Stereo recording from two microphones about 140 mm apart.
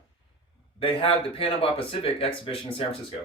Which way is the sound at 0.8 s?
40° left (ahead or behind).